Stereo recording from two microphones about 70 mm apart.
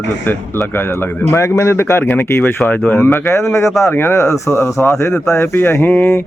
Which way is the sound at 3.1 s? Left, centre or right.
Left.